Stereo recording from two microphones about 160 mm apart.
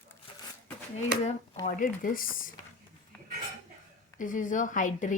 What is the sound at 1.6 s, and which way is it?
Speech, 55° left (ahead or behind).